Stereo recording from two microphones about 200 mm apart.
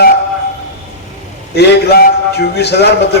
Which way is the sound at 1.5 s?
55° left (ahead or behind).